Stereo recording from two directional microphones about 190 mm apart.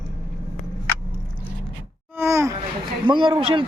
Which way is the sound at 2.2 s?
15° right (ahead or behind).